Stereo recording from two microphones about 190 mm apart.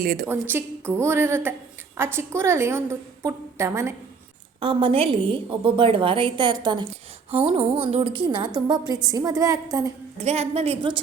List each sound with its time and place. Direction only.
0.0 s a woman's voice: 50° right (ahead or behind)
0.3 s a woman's voice: 10° right (ahead or behind)
4.6 s a woman's voice: 30° right (ahead or behind)
10.2 s a woman's voice: 35° right (ahead or behind)